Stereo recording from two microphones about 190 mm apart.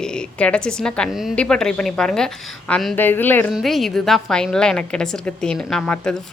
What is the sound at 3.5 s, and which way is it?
A woman's voice, centre (ahead or behind).